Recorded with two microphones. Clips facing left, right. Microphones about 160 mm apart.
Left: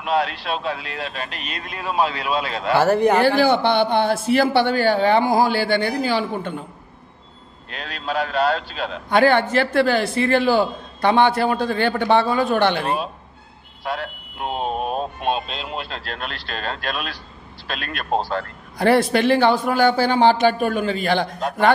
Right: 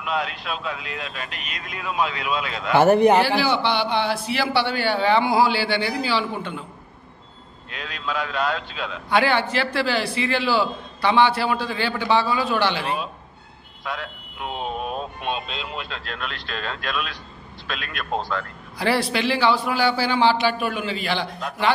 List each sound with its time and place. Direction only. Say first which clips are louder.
0.0 s speech: left 5 dB; 35° left (ahead or behind)
2.7 s a man's voice: right 1 dB; 20° right (ahead or behind)
3.2 s a man's voice: left 4 dB; 50° left (ahead or behind)
7.7 s a man's voice: left 3 dB; 40° left (ahead or behind)
13.8 s music: left 4 dB; 35° left (ahead or behind)
17.6 s a man's voice: left 4 dB; 40° left (ahead or behind)